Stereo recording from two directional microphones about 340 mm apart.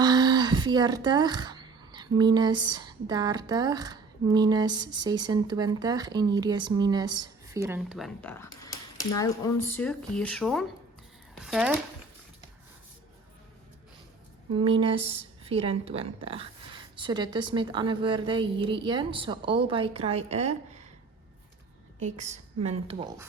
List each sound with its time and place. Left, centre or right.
0.0 s speech: centre
14.5 s speech: centre
22.0 s a woman's voice: centre